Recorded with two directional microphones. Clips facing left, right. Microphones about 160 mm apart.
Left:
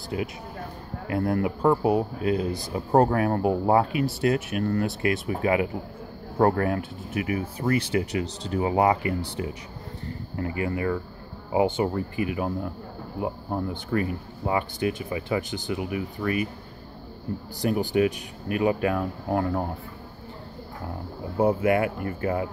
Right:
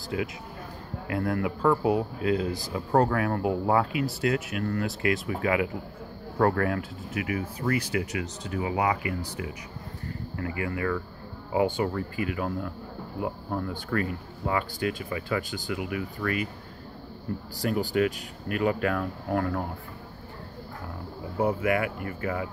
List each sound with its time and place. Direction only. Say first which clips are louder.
1.0 s speech: left 3 dB; 30° left (ahead or behind)
17.6 s speech: left 3 dB; 20° left (ahead or behind)
21.4 s speech: left 4 dB; 25° left (ahead or behind)